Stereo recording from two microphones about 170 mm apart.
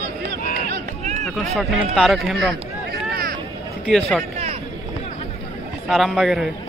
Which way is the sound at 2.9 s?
60° right (ahead or behind).